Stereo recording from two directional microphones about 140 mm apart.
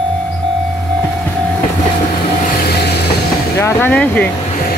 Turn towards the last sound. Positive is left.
turn(degrees=10)  # may be behind; listen again after turning